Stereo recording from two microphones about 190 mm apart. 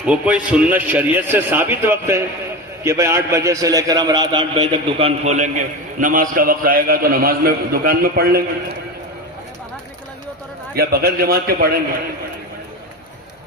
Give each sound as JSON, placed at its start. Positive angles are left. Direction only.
{"t": 0.0, "sound": "a man's voice", "side_deg": -5}
{"t": 10.8, "sound": "a man's voice", "side_deg": -55}